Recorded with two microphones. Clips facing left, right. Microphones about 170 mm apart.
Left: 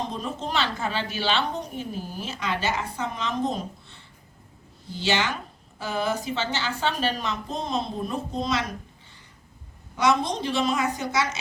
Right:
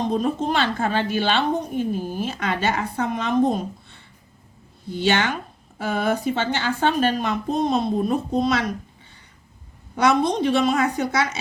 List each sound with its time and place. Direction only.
0.1 s a woman's voice: 50° right (ahead or behind)
9.9 s a woman's voice: 55° right (ahead or behind)